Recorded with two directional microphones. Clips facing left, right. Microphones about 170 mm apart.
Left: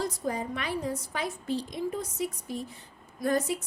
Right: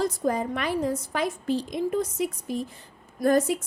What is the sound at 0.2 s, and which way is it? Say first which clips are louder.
Speech: right 6 dB; 70° right (ahead or behind).